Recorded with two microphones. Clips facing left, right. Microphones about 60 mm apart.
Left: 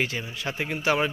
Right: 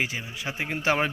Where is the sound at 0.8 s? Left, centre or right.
Right.